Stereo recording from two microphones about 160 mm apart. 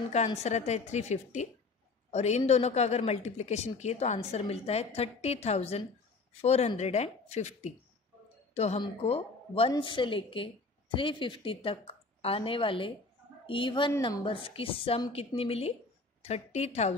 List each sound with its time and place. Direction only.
0.4 s a woman's voice: 45° left (ahead or behind)